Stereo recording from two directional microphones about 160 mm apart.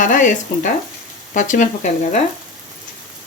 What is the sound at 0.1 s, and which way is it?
Speech, 50° left (ahead or behind).